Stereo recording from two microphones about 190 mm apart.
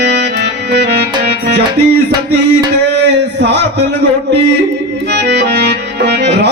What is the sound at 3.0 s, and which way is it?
Tabla, 65° right (ahead or behind).